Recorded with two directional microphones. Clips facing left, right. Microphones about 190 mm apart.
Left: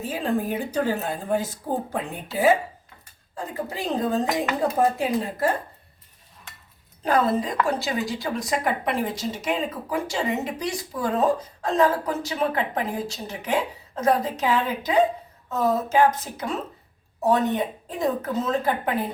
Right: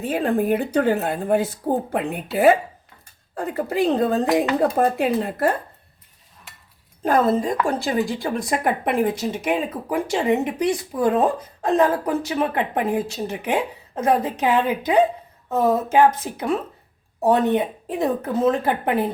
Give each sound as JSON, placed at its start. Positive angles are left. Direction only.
{"t": 0.0, "sound": "a woman's voice", "side_deg": -60}
{"t": 7.0, "sound": "a woman's voice", "side_deg": -50}